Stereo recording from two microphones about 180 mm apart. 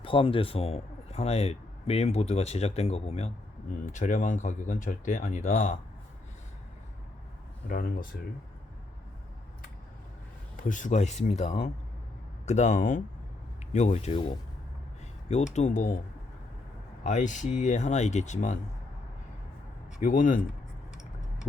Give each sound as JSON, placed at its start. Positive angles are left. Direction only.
{"t": 0.0, "sound": "speech", "side_deg": 30}
{"t": 7.7, "sound": "speech", "side_deg": 50}
{"t": 10.6, "sound": "speech", "side_deg": 45}
{"t": 15.5, "sound": "speech", "side_deg": 40}
{"t": 17.0, "sound": "speech", "side_deg": 40}
{"t": 20.0, "sound": "speech", "side_deg": 45}